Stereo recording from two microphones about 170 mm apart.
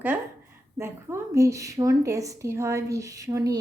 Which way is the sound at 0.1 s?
10° right (ahead or behind).